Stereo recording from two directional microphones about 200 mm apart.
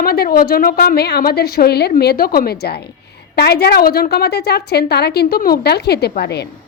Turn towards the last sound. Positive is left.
turn(degrees=55)  # may be behind; listen again after turning